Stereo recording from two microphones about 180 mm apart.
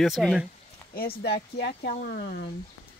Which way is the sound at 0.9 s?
60° left (ahead or behind).